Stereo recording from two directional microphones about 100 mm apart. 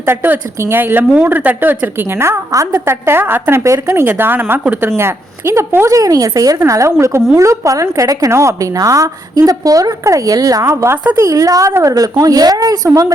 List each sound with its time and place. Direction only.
0.0 s speech: 20° right (ahead or behind)
4.9 s a woman's voice: 25° right (ahead or behind)